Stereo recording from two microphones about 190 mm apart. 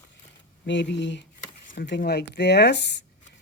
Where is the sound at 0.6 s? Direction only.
70° left (ahead or behind).